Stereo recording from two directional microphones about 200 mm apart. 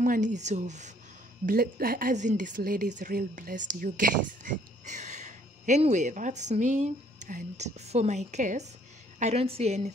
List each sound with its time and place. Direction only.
0.0 s speech: 40° right (ahead or behind)
1.4 s speech: 50° right (ahead or behind)